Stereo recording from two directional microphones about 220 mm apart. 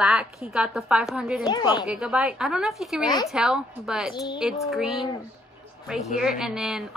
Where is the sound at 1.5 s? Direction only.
20° left (ahead or behind).